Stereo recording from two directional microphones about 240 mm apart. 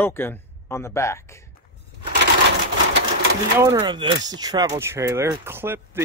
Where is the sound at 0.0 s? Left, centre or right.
Centre.